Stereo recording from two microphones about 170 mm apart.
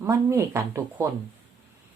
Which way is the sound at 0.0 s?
15° right (ahead or behind).